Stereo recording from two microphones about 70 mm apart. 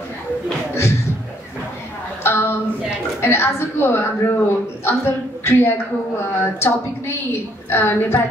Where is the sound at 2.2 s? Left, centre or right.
Left.